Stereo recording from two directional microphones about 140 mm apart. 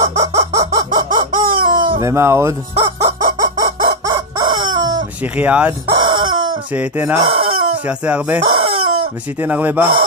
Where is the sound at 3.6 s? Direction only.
90° right.